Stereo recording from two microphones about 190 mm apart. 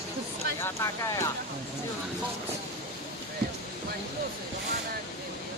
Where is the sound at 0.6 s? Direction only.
15° left (ahead or behind).